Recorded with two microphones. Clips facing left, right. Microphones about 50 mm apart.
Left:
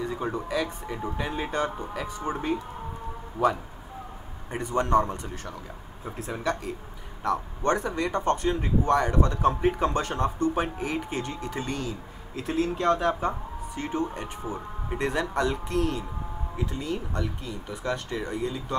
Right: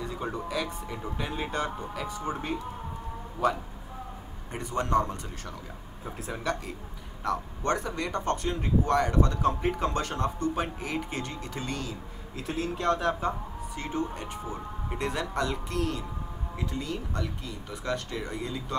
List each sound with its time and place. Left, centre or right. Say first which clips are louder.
0.0 s speech: left 3 dB; centre
3.4 s speech: left 3 dB; centre